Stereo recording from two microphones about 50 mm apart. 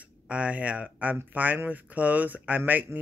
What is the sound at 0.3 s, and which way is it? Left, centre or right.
Speech, right.